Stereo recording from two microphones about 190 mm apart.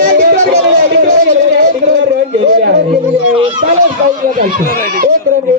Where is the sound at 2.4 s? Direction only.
50° right (ahead or behind).